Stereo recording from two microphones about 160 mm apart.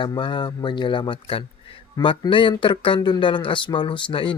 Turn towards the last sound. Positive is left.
turn(degrees=30)  # may be behind; listen again after turning